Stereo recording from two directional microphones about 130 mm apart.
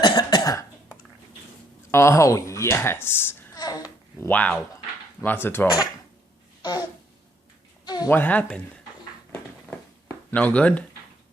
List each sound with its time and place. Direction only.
0.0 s cough: 35° left (ahead or behind)
1.9 s a woman's voice: 20° left (ahead or behind)
3.6 s babbling: 30° left (ahead or behind)
4.3 s a woman's voice: 10° left (ahead or behind)
6.6 s a sound: 30° left (ahead or behind)
7.9 s a sound: 30° left (ahead or behind)
8.1 s a woman's voice: 15° left (ahead or behind)
10.3 s a woman's voice: 10° left (ahead or behind)